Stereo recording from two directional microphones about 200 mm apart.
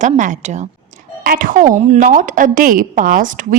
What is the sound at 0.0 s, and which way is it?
A woman's voice, 40° right (ahead or behind).